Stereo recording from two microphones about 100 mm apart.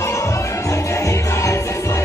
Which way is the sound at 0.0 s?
30° left (ahead or behind).